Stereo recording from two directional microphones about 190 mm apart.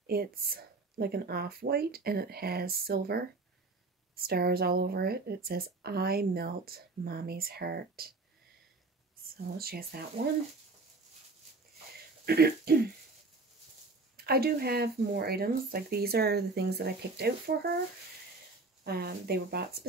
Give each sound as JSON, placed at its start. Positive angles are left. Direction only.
{"t": 0.0, "sound": "speech", "side_deg": -55}
{"t": 9.6, "sound": "speech", "side_deg": -55}
{"t": 12.3, "sound": "speech", "side_deg": -55}
{"t": 14.1, "sound": "speech", "side_deg": -55}
{"t": 18.9, "sound": "speech", "side_deg": -55}